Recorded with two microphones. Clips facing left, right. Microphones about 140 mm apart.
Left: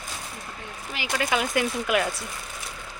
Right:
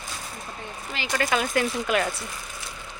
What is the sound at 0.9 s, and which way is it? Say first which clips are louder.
Speech: right 1 dB; 10° left (ahead or behind).